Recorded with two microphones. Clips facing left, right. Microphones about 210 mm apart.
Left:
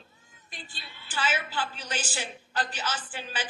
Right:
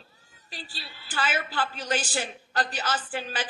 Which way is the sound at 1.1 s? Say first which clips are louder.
Right 1 dB; 50° right (ahead or behind).